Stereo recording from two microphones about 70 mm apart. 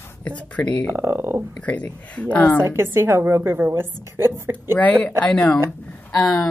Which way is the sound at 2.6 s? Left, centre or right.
Right.